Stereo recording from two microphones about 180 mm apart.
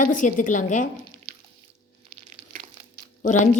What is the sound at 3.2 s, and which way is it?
Speech, 45° left (ahead or behind).